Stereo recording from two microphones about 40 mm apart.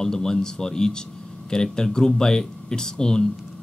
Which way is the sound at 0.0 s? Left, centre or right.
Centre.